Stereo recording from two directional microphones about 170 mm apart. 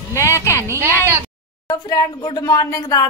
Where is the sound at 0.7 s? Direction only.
15° right (ahead or behind).